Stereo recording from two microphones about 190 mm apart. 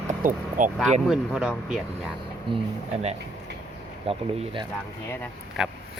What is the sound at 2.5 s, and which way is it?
Speech, 25° right (ahead or behind).